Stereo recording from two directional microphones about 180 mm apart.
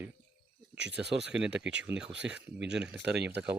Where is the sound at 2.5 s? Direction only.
70° right (ahead or behind).